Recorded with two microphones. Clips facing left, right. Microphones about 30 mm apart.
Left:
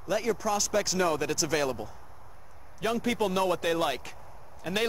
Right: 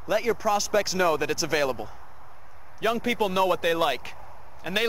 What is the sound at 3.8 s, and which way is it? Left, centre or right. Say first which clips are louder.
Speech: right 4 dB; centre.